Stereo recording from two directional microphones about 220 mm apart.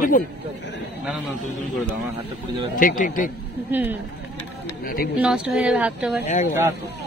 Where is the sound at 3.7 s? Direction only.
10° right (ahead or behind).